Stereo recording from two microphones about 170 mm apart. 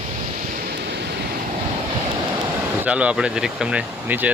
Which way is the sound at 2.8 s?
10° right (ahead or behind).